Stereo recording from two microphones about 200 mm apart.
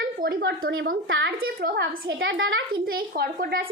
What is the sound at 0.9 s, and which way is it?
A woman's voice, 60° right (ahead or behind).